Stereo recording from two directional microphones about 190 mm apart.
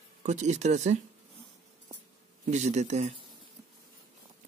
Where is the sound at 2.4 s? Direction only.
40° right (ahead or behind).